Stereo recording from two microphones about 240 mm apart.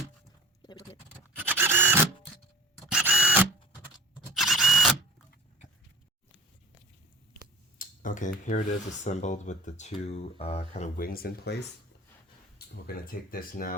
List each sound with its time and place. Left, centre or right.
1.5 s printer: centre
2.9 s a sound: centre
4.4 s camera: centre
7.8 s speech: left
12.5 s speech: left